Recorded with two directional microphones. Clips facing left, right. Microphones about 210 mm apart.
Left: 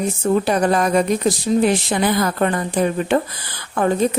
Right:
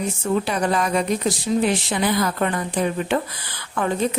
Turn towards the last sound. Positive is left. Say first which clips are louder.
# left 5 dB
turn(degrees=40)  # may be behind; listen again after turning